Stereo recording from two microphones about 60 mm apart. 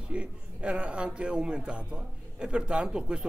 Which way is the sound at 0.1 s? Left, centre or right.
Centre.